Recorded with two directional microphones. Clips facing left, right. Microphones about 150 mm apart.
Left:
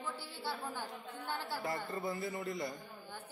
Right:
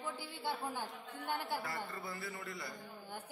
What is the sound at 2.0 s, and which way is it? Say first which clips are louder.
Speech: left 7 dB; 20° left (ahead or behind).